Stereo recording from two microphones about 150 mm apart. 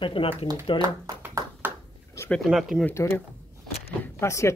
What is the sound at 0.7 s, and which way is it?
Speech, 25° right (ahead or behind).